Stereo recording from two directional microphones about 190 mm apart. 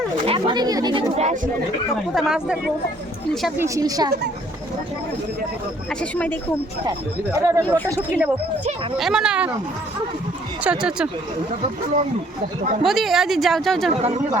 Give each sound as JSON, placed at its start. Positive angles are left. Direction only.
{"t": 0.3, "sound": "speech", "side_deg": -25}
{"t": 1.1, "sound": "speech", "side_deg": -35}
{"t": 2.1, "sound": "speech", "side_deg": -5}
{"t": 3.6, "sound": "speech", "side_deg": -20}
{"t": 5.9, "sound": "speech", "side_deg": 5}
{"t": 7.3, "sound": "speech", "side_deg": -15}
{"t": 9.0, "sound": "speech", "side_deg": -5}
{"t": 10.6, "sound": "speech", "side_deg": -5}
{"t": 12.8, "sound": "speech", "side_deg": 0}